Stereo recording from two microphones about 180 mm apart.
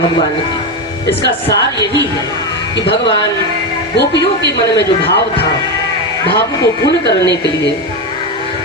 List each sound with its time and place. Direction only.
4.8 s a woman's voice: 65° left (ahead or behind)
6.8 s a woman's voice: 70° left (ahead or behind)